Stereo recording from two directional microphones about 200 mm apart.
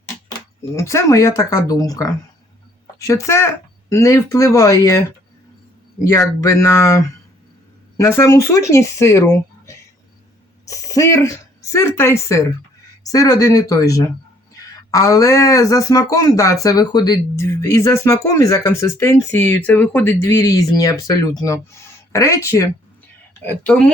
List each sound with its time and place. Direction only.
0.7 s speech: 15° left (ahead or behind)